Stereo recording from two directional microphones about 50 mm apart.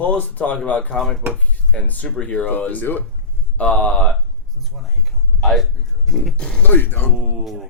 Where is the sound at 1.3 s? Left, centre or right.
Left.